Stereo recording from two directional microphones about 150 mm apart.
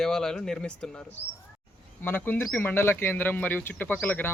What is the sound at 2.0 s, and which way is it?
Speech, 15° left (ahead or behind).